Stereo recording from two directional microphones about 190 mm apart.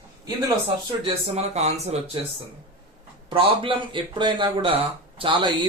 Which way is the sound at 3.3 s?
25° right (ahead or behind).